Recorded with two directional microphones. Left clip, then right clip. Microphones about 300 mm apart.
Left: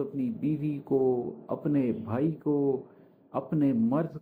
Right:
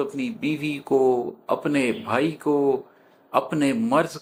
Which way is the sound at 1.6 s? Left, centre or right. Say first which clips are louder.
Right 6 dB; centre.